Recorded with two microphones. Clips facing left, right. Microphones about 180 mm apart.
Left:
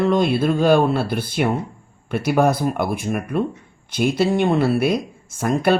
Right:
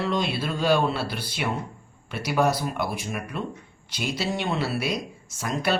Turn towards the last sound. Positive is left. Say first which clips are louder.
# left 8 dB
turn(degrees=55)  # may be behind; listen again after turning